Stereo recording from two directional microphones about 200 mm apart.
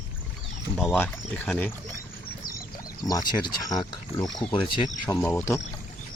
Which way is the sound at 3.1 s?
20° left (ahead or behind).